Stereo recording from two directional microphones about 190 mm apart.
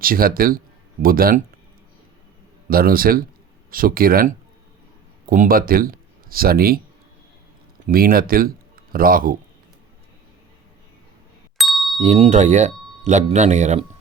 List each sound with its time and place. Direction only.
0.0 s speech: 50° right (ahead or behind)
2.6 s speech: 50° right (ahead or behind)
7.9 s speech: 50° right (ahead or behind)
11.5 s ding: centre (ahead or behind)
11.9 s speech: 35° right (ahead or behind)